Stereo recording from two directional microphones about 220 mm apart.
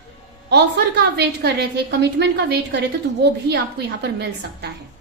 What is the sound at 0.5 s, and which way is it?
A woman's voice, 50° right (ahead or behind).